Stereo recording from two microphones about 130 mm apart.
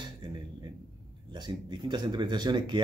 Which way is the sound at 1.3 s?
35° right (ahead or behind).